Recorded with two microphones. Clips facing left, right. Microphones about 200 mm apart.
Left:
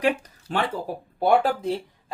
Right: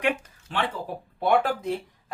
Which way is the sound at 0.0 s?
35° left (ahead or behind).